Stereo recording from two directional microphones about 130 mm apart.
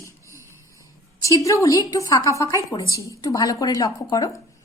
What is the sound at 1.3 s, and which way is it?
A woman's voice, 25° left (ahead or behind).